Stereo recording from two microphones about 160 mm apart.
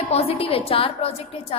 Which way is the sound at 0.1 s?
40° left (ahead or behind).